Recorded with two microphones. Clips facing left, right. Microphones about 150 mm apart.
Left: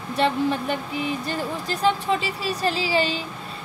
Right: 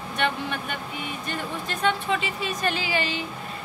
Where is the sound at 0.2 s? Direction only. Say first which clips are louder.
Left 6 dB; 30° left (ahead or behind).